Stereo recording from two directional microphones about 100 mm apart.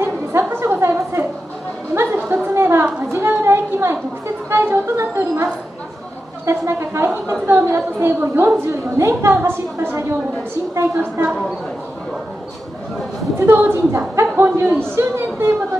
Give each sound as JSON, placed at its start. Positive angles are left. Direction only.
{"t": 0.0, "sound": "a sound", "side_deg": -25}
{"t": 4.5, "sound": "a woman's voice", "side_deg": -25}
{"t": 13.5, "sound": "a woman's voice", "side_deg": -20}